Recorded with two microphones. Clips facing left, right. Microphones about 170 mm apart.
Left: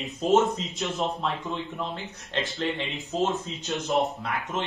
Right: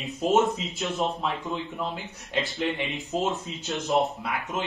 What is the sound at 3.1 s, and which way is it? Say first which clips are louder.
Speech: left 2 dB; 10° right (ahead or behind).